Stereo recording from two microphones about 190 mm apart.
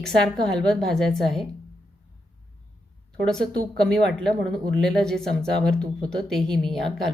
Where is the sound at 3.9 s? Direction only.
Centre (ahead or behind).